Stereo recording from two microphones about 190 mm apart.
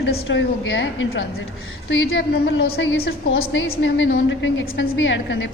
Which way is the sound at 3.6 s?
70° left (ahead or behind).